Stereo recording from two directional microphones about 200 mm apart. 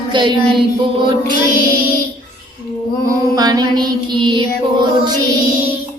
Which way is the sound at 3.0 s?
20° right (ahead or behind).